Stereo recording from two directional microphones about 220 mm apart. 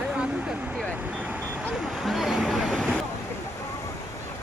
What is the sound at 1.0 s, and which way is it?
Vehicle, 5° right (ahead or behind).